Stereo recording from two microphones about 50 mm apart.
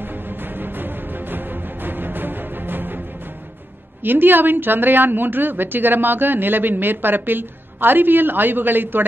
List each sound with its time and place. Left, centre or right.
0.0 s music: right
4.0 s a woman's voice: right